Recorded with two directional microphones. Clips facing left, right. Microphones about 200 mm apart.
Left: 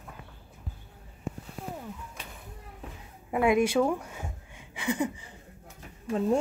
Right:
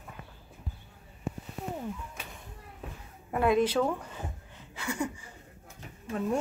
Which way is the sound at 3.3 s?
15° left (ahead or behind).